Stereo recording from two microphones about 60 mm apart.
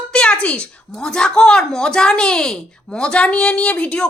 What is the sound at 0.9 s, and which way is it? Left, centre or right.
Speech, centre.